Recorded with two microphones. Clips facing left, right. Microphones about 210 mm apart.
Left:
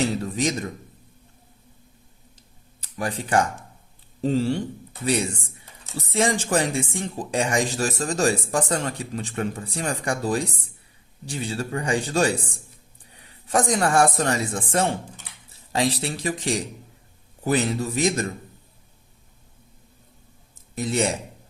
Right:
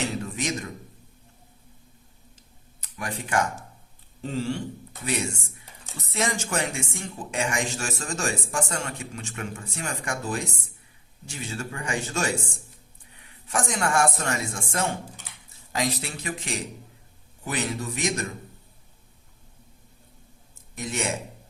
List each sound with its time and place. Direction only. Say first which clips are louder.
3.0 s speech: left 4 dB; 35° left (ahead or behind)
20.7 s speech: left 7 dB; 35° left (ahead or behind)